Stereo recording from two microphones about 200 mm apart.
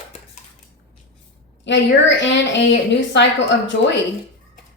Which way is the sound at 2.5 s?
60° left (ahead or behind).